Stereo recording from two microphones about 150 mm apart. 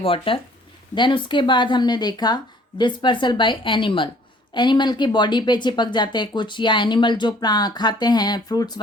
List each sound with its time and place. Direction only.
0.0 s speech: 35° left (ahead or behind)